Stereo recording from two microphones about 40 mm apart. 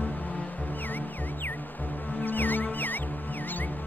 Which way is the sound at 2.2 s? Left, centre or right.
Left.